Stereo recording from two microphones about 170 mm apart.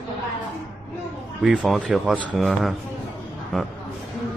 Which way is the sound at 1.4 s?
5° right (ahead or behind).